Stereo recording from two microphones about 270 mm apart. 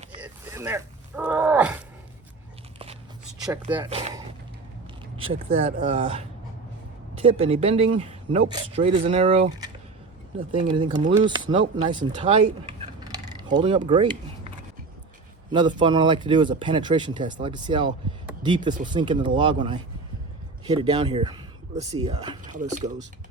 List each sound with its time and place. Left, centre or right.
0.2 s a sound: centre
3.8 s speech: right
10.7 s speech: centre
12.8 s a sound: centre
15.5 s speech: centre
22.5 s speech: right